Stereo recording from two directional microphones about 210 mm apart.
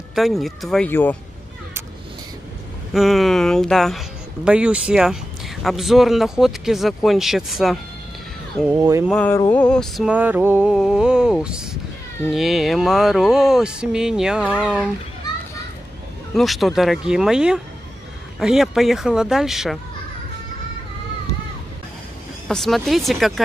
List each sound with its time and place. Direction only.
0.1 s speech: centre (ahead or behind)
2.9 s speech: centre (ahead or behind)
8.7 s a sound: 15° right (ahead or behind)
9.1 s a sound: 5° left (ahead or behind)
9.5 s speech: 5° left (ahead or behind)
16.3 s speech: centre (ahead or behind)
22.5 s speech: centre (ahead or behind)